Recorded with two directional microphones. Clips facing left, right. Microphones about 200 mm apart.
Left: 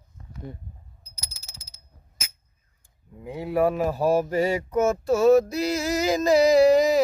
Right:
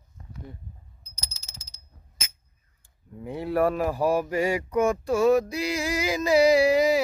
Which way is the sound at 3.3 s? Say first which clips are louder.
Left 1 dB; centre (ahead or behind).